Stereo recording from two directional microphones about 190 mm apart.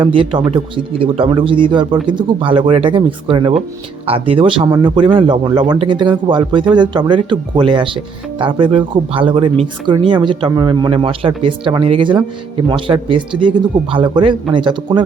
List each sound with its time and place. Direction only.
0.0 s speech: 25° right (ahead or behind)